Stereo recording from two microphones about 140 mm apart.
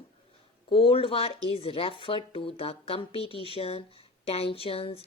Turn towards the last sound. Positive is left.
turn(degrees=45)  # may be behind; listen again after turning